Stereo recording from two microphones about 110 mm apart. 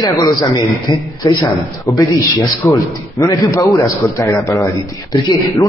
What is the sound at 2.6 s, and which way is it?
A man's voice, 20° left (ahead or behind).